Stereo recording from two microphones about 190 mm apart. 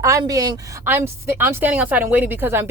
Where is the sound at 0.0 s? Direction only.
15° right (ahead or behind).